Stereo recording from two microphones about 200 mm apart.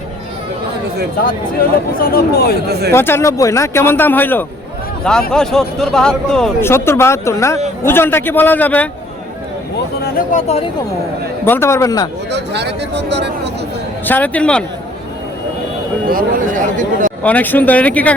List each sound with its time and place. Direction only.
2.0 s speech: 50° left (ahead or behind)
2.6 s speech: 55° right (ahead or behind)
2.9 s a man's voice: 10° left (ahead or behind)
10.0 s speech: 45° left (ahead or behind)
10.4 s speech: 30° left (ahead or behind)
11.4 s a man's voice: 10° left (ahead or behind)
12.3 s speech: 60° right (ahead or behind)
14.0 s a man's voice: 10° left (ahead or behind)
16.0 s speech: 45° right (ahead or behind)
17.2 s a man's voice: 10° left (ahead or behind)